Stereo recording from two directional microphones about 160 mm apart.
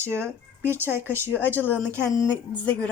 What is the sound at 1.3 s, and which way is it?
Speech, 10° left (ahead or behind).